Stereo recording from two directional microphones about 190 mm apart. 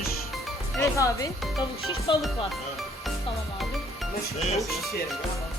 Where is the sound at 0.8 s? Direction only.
15° left (ahead or behind).